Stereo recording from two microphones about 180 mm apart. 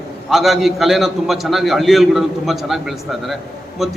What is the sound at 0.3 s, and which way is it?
A man's voice, centre (ahead or behind).